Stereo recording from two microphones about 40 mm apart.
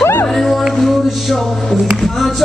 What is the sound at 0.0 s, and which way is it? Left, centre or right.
Music, left.